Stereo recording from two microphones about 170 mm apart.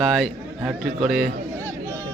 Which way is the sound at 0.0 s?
Centre (ahead or behind).